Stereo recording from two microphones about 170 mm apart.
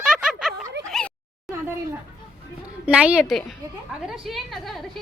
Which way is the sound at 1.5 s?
15° right (ahead or behind).